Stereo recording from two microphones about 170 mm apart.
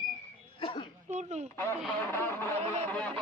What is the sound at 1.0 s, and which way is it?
Speech, 45° right (ahead or behind).